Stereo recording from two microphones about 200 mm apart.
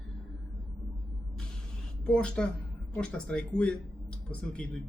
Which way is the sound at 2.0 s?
5° left (ahead or behind).